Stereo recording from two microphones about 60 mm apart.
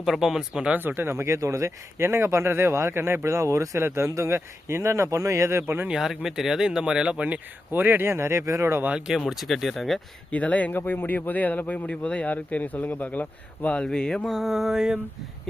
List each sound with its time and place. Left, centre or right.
0.0 s speech: centre
0.8 s speech: right
2.0 s speech: right
3.3 s speech: right
5.9 s speech: centre
7.7 s speech: right
9.1 s mantra: centre
10.3 s speech: left
10.8 s speech: left
11.9 s speech: centre
13.8 s mantra: centre